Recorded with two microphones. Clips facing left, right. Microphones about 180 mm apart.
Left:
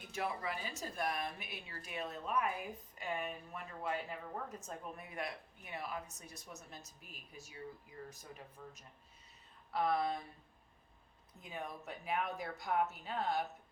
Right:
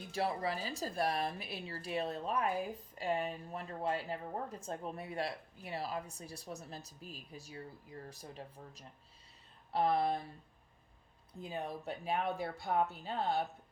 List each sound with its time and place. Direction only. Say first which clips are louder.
0.1 s speech: right 4 dB; 35° right (ahead or behind)
11.3 s speech: right 5 dB; 30° right (ahead or behind)